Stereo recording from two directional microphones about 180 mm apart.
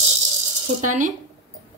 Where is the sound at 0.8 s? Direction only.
45° right (ahead or behind).